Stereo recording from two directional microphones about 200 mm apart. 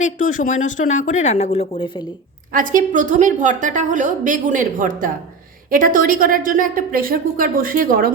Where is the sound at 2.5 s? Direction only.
45° right (ahead or behind).